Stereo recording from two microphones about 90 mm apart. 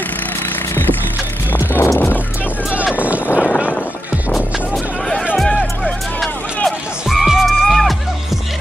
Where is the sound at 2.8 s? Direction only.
15° right (ahead or behind).